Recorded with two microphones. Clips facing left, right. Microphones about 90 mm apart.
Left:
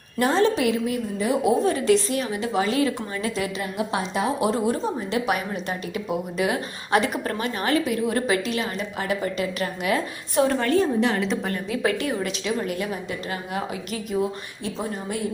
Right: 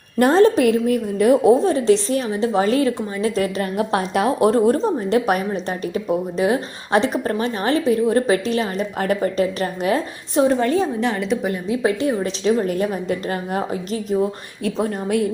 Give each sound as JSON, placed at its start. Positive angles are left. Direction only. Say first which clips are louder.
{"t": 0.2, "sound": "a woman's voice", "louder": "right 7 dB", "side_deg": -45}
{"t": 1.6, "sound": "a woman's voice", "louder": "right 4 dB", "side_deg": -30}
{"t": 4.4, "sound": "a woman's voice", "louder": "right 7 dB", "side_deg": -45}
{"t": 10.3, "sound": "a woman's voice", "louder": "right 3 dB", "side_deg": -20}
{"t": 11.0, "sound": "a woman's voice", "louder": "right 2 dB", "side_deg": 0}
{"t": 11.4, "sound": "a woman's voice", "louder": "right 5 dB", "side_deg": -20}
{"t": 14.6, "sound": "a woman's voice", "louder": "right 8 dB", "side_deg": -55}